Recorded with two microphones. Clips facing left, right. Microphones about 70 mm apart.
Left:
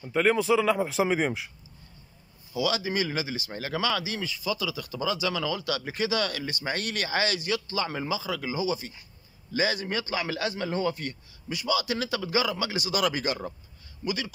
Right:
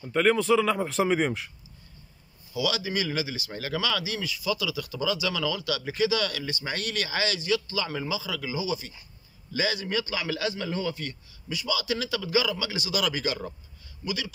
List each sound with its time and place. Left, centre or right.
0.0 s a man's voice: centre
2.5 s speech: left